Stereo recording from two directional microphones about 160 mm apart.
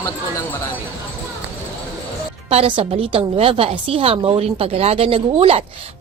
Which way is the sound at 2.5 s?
35° right (ahead or behind).